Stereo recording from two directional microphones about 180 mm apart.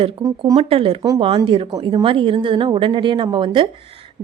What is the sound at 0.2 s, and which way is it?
Speech, 20° right (ahead or behind).